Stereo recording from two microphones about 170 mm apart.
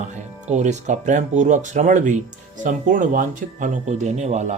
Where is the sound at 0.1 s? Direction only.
45° right (ahead or behind).